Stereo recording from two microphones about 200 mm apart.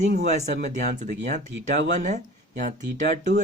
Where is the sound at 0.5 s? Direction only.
40° right (ahead or behind).